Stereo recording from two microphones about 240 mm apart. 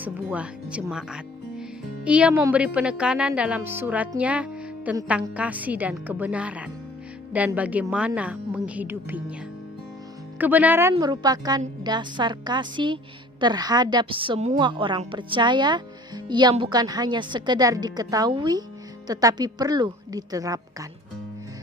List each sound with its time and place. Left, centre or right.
0.0 s a woman's voice: centre
10.3 s a woman's voice: centre